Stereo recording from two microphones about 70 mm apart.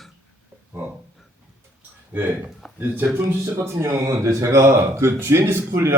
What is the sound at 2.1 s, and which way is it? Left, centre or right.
Speech, right.